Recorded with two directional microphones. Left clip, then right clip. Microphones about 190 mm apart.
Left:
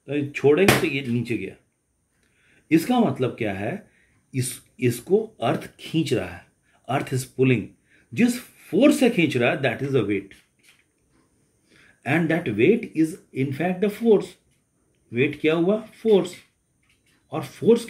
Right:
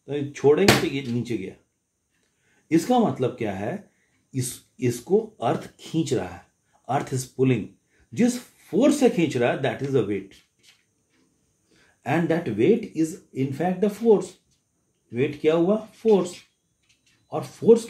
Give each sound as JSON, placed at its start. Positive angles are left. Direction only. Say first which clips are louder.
{"t": 0.0, "sound": "speech", "louder": "left 1 dB", "side_deg": 40}
{"t": 2.7, "sound": "speech", "louder": "even", "side_deg": 40}
{"t": 11.7, "sound": "speech", "louder": "left 1 dB", "side_deg": 50}
{"t": 15.0, "sound": "speech", "louder": "left 1 dB", "side_deg": 45}
{"t": 17.3, "sound": "speech", "louder": "right 2 dB", "side_deg": 45}